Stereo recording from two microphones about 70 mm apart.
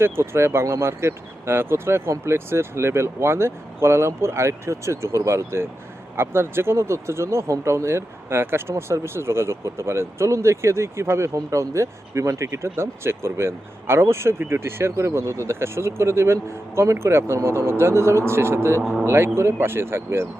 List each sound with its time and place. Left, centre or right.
0.0 s speech: right